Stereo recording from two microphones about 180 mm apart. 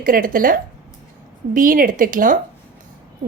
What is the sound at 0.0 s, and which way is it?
A woman's voice, 50° right (ahead or behind).